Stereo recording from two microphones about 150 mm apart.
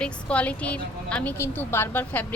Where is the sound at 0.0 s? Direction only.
10° left (ahead or behind).